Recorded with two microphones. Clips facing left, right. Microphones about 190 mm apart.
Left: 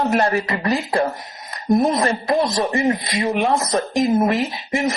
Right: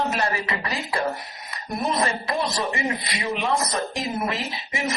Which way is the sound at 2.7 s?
40° left (ahead or behind).